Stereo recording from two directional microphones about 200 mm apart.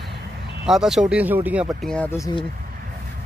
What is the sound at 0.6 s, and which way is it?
Speech, centre (ahead or behind).